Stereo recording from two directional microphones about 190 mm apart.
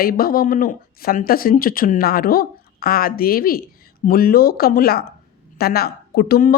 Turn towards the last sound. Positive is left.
turn(degrees=50)  # may be behind; listen again after turning